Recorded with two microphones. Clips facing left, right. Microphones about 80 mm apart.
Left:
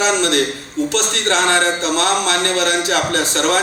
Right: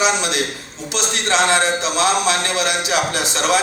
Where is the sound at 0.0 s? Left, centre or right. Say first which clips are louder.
Left 3 dB; left.